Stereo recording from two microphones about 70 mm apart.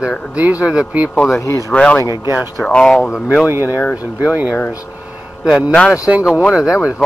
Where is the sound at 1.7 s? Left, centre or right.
Centre.